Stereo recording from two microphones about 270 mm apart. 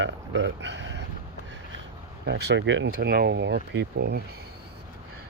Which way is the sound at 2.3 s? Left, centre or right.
Right.